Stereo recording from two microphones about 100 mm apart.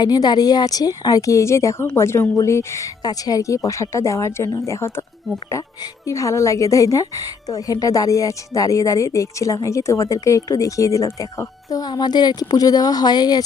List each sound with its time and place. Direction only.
0.0 s a woman's voice: 45° left (ahead or behind)